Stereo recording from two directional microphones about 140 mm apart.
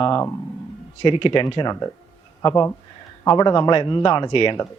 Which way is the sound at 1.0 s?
35° left (ahead or behind).